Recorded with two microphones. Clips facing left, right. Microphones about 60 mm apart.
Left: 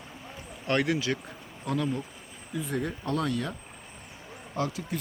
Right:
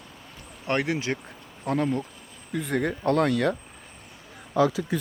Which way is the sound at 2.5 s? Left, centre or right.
Right.